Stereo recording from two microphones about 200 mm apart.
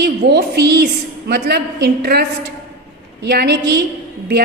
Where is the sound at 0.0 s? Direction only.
55° right (ahead or behind).